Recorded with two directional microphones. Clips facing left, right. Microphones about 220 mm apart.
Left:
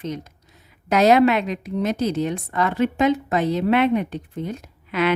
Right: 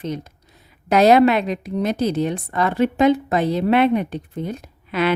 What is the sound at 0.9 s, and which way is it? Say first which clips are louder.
A woman's voice: right 2 dB; 35° right (ahead or behind).